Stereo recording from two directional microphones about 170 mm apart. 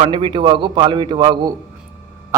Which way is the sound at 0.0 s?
30° right (ahead or behind).